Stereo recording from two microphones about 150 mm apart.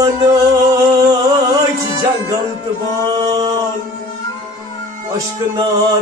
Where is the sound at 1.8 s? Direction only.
25° right (ahead or behind).